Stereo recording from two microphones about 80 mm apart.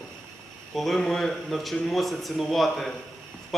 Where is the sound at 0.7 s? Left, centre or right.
Centre.